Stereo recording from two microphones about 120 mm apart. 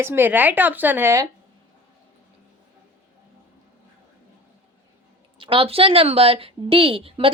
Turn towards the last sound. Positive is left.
turn(degrees=-50)  # may be behind; listen again after turning